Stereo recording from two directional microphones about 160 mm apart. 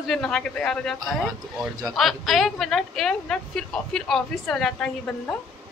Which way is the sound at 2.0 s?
Centre (ahead or behind).